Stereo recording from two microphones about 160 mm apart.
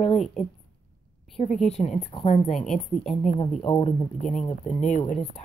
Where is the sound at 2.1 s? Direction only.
40° left (ahead or behind).